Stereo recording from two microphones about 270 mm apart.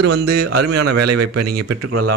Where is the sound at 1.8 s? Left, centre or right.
Right.